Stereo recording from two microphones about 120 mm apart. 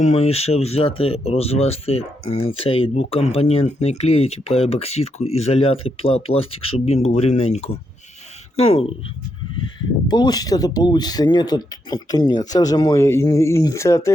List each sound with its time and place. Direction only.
0.0 s speech: 60° left (ahead or behind)
10.1 s speech: 35° left (ahead or behind)
13.0 s speech: 20° left (ahead or behind)